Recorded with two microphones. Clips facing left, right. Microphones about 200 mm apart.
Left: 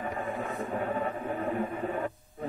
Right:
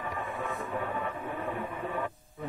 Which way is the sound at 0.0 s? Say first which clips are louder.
Left 2 dB; 40° left (ahead or behind).